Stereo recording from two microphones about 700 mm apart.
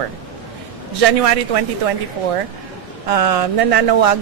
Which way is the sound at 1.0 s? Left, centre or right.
Right.